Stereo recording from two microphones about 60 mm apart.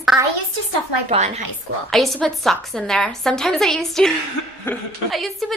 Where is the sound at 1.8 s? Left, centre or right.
Centre.